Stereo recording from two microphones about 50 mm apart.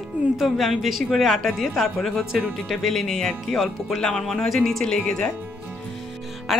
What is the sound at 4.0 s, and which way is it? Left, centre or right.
Speech, centre.